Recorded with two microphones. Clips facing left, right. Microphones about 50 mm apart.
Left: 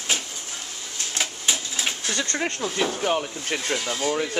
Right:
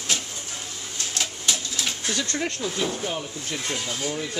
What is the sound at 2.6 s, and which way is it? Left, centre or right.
Speech, left.